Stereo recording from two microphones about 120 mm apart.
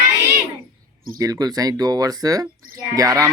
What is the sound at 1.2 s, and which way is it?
Speech, 30° right (ahead or behind).